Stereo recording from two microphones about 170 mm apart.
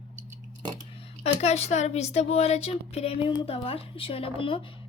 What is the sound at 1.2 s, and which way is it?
A woman's voice, 40° left (ahead or behind).